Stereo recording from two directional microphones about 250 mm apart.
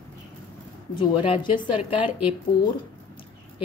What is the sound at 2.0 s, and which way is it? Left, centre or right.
Speech, centre.